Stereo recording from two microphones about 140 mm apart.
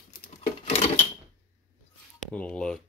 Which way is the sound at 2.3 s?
5° left (ahead or behind).